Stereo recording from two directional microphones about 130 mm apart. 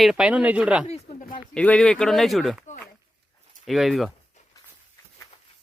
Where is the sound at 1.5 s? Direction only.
10° left (ahead or behind).